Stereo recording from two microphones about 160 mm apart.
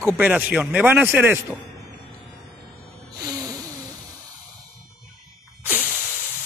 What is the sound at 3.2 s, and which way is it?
Music, 20° right (ahead or behind).